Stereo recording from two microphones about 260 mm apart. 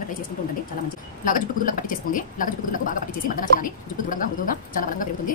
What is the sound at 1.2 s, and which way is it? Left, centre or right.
A woman's voice, left.